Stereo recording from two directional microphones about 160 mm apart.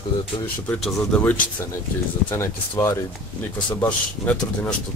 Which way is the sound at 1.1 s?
10° left (ahead or behind).